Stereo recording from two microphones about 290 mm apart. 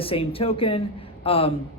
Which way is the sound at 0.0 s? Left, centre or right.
Centre.